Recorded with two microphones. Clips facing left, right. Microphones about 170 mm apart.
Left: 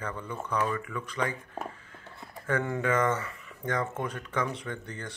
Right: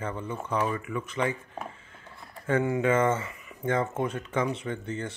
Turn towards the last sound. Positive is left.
turn(degrees=-25)  # may be behind; listen again after turning